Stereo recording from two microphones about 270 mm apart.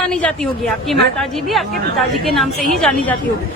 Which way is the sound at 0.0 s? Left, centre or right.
Centre.